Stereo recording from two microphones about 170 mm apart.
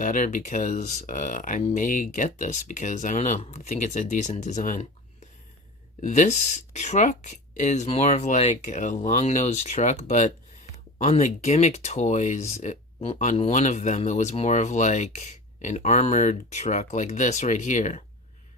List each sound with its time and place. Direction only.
0.0 s speech: 50° left (ahead or behind)
6.0 s speech: 45° left (ahead or behind)